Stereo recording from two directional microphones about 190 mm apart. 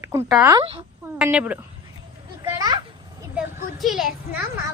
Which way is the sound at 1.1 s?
10° right (ahead or behind).